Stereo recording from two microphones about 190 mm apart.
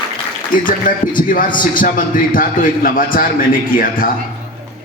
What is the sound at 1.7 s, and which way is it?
A man's voice, 45° left (ahead or behind).